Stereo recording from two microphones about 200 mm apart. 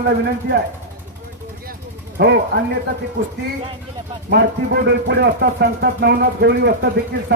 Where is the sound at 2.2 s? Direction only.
55° right (ahead or behind).